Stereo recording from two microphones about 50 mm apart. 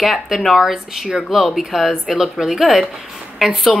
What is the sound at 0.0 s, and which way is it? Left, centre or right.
A woman's voice, centre.